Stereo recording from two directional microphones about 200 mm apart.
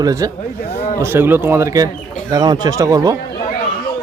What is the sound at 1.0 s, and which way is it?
Speech, 10° right (ahead or behind).